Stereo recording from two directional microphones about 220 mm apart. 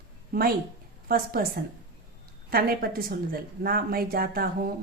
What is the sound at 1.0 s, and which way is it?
Speech, 40° right (ahead or behind).